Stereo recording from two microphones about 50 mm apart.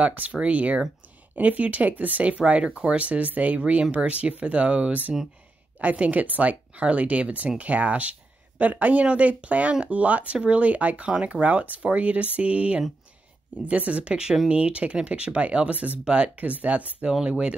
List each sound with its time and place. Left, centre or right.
0.0 s speech: right